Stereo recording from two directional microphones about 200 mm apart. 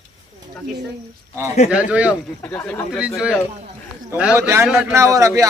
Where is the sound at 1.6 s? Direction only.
5° right (ahead or behind).